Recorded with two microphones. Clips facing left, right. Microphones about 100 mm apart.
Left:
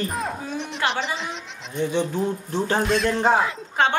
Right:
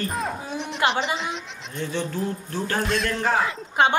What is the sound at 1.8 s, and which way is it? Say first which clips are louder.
Speech: left 4 dB; 15° left (ahead or behind).